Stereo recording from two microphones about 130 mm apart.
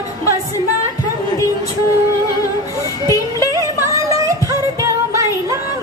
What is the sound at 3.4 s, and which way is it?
Music, 25° right (ahead or behind).